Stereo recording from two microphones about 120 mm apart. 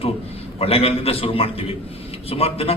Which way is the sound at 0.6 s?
55° left (ahead or behind).